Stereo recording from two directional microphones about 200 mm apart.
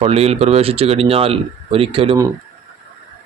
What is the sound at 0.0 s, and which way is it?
Speech, 30° right (ahead or behind).